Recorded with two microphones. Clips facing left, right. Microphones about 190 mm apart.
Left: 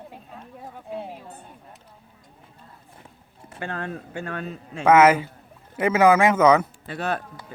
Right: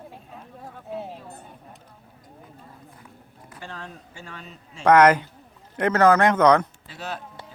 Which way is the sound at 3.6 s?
60° left (ahead or behind).